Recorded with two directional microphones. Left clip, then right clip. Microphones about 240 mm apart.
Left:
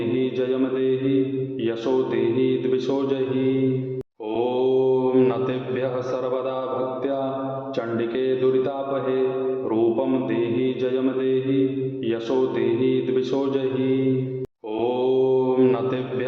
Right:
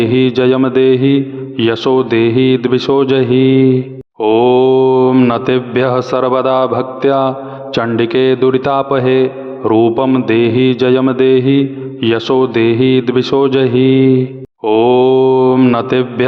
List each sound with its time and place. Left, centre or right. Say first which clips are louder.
0.1 s a man's voice: right 12 dB; right
4.2 s mantra: right 14 dB; right
7.8 s a man's voice: right 13 dB; right
14.6 s mantra: right 15 dB; right